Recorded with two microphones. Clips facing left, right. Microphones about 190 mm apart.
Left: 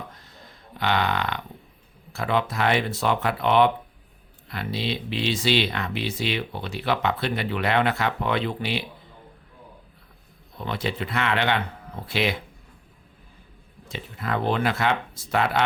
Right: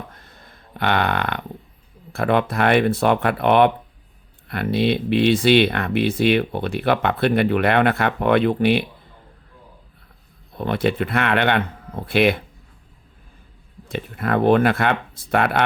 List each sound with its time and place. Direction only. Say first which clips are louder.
0.1 s a sound: right 1 dB; 55° right (ahead or behind)
2.1 s speech: right 6 dB; 55° right (ahead or behind)
10.6 s speech: right 8 dB; 55° right (ahead or behind)
13.8 s speech: right 7 dB; 55° right (ahead or behind)